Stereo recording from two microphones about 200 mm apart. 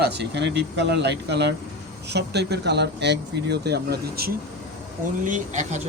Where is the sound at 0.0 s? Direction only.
55° right (ahead or behind).